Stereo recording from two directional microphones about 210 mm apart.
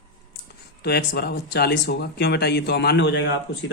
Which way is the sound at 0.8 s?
50° left (ahead or behind).